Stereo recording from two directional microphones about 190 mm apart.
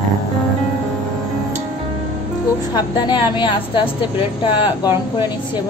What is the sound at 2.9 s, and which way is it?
A woman's voice, 25° left (ahead or behind).